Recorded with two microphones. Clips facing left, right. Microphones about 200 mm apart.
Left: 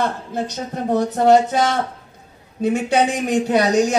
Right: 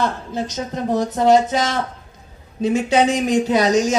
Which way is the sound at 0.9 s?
60° left (ahead or behind).